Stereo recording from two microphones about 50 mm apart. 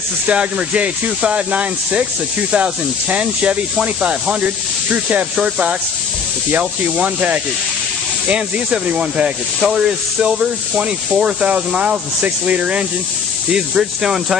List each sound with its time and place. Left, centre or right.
0.3 s speech: right
13.5 s speech: centre